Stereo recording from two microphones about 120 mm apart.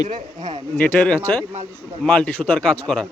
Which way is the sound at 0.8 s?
10° left (ahead or behind).